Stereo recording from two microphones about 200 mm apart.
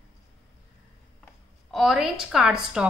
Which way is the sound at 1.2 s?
Centre (ahead or behind).